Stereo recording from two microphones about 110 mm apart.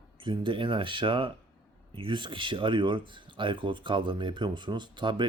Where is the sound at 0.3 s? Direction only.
50° right (ahead or behind).